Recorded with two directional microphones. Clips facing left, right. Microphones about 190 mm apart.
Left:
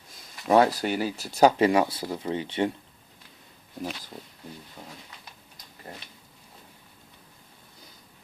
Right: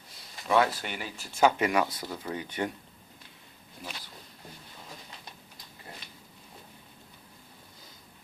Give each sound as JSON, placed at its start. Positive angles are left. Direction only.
{"t": 0.4, "sound": "speech", "side_deg": 40}